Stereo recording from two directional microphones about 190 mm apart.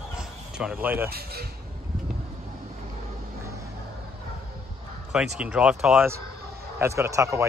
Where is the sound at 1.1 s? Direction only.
55° right (ahead or behind).